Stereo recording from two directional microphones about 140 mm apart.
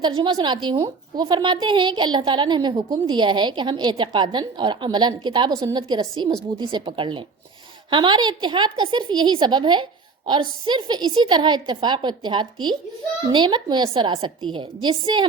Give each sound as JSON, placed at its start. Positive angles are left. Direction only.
{"t": 0.0, "sound": "a woman's voice", "side_deg": -35}